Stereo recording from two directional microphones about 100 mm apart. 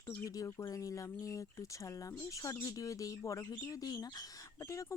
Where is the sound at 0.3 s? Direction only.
35° left (ahead or behind).